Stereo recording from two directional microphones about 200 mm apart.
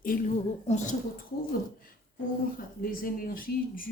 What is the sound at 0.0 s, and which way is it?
Speech, 45° left (ahead or behind).